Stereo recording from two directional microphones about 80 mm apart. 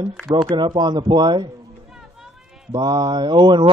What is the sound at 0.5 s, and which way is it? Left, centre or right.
Speech, right.